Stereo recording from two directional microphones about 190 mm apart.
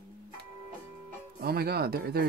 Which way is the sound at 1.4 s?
55° right (ahead or behind).